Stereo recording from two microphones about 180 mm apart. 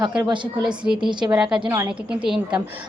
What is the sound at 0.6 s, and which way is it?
A woman's voice, 5° right (ahead or behind).